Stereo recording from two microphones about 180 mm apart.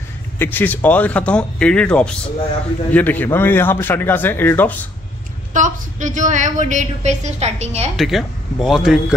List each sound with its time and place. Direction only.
0.4 s speech: 10° left (ahead or behind)
5.5 s a woman's voice: 45° right (ahead or behind)
7.9 s speech: centre (ahead or behind)